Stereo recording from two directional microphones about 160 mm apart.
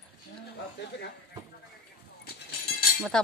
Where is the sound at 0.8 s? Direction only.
90° left.